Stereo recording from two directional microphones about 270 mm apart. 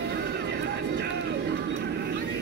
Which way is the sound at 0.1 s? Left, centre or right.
Right.